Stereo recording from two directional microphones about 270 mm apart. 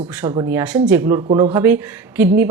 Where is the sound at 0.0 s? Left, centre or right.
Centre.